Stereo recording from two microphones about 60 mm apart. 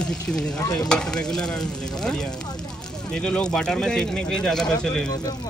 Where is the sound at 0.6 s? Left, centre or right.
Left.